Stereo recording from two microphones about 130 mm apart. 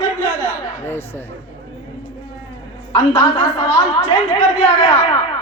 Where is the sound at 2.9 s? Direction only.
40° left (ahead or behind).